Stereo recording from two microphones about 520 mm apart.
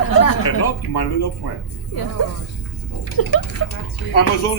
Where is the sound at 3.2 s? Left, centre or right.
Left.